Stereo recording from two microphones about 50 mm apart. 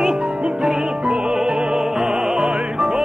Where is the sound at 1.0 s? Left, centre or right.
Right.